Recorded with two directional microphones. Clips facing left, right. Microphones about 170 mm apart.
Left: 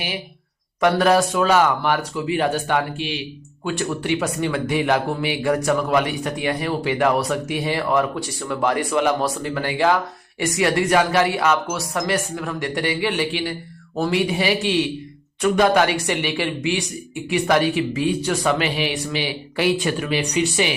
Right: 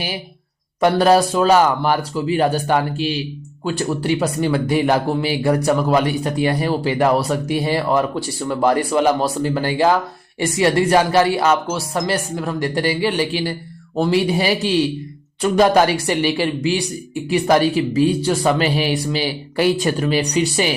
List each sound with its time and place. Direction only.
0.8 s speech: 30° right (ahead or behind)